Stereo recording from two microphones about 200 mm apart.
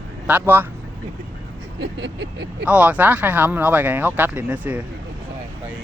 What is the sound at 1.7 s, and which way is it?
Vehicle, 60° right (ahead or behind).